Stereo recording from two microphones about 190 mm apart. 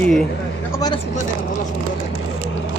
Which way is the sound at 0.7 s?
20° left (ahead or behind).